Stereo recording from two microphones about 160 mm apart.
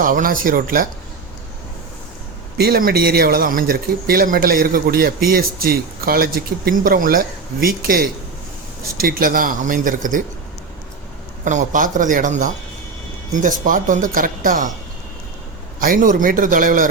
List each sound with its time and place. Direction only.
0.0 s speech: 60° right (ahead or behind)
2.6 s speech: 70° right (ahead or behind)
11.4 s speech: 55° right (ahead or behind)
15.8 s speech: 60° right (ahead or behind)